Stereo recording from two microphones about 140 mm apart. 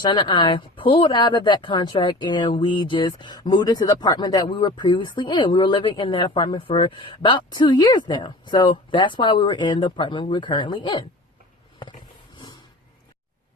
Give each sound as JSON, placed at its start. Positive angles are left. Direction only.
{"t": 0.0, "sound": "speech", "side_deg": 35}